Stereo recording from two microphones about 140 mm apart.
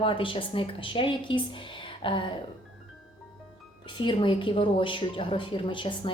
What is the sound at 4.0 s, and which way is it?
A woman's voice, 35° left (ahead or behind).